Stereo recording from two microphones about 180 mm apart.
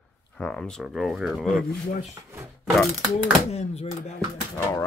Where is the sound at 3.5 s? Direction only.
35° left (ahead or behind).